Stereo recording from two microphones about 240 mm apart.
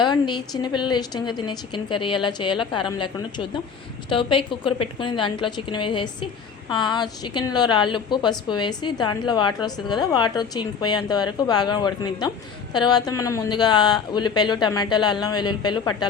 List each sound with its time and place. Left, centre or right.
0.0 s a woman's voice: centre